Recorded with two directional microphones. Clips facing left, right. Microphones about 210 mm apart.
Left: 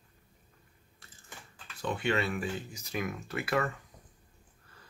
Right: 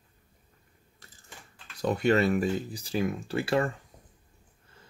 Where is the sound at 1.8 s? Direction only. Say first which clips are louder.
Right 7 dB; 40° right (ahead or behind).